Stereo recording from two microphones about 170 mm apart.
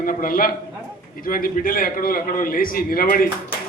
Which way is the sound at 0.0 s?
55° left (ahead or behind).